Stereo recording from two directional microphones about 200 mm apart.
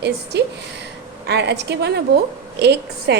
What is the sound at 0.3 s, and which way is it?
A woman's voice, 55° right (ahead or behind).